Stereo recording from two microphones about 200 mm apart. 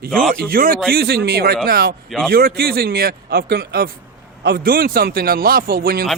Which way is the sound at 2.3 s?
50° right (ahead or behind).